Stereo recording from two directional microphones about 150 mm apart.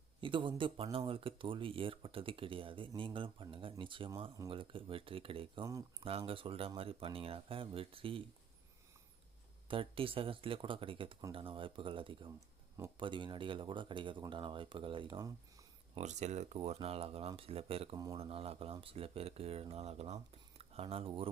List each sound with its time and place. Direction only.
0.2 s speech: 35° right (ahead or behind)
9.6 s speech: 35° right (ahead or behind)
16.0 s speech: 50° right (ahead or behind)